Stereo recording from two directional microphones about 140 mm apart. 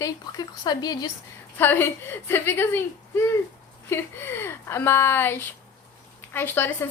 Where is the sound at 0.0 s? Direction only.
30° left (ahead or behind).